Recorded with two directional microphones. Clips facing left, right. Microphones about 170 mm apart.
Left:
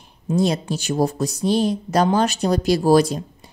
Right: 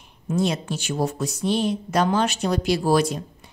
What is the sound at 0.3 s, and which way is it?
A woman's voice, 35° left (ahead or behind).